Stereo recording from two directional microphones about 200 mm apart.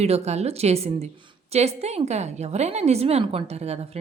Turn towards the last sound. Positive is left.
turn(degrees=-30)  # may be behind; listen again after turning